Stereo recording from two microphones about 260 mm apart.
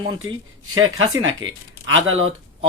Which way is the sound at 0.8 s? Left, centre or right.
Right.